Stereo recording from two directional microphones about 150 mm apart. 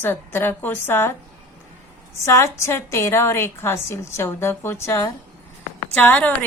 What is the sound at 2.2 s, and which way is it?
A woman's voice, 20° left (ahead or behind).